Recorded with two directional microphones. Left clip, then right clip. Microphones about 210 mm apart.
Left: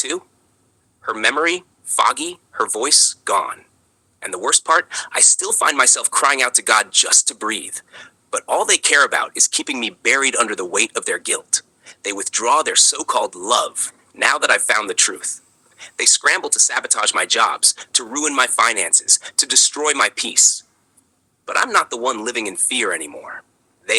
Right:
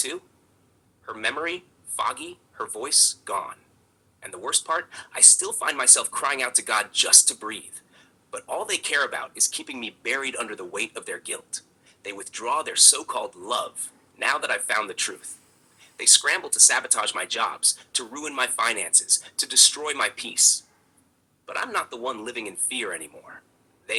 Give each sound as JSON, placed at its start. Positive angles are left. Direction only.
{"t": 1.0, "sound": "a man's voice", "side_deg": 40}